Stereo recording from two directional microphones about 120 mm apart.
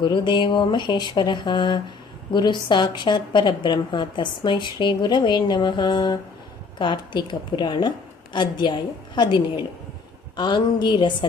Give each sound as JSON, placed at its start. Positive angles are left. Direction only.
{"t": 0.0, "sound": "a woman's voice", "side_deg": 40}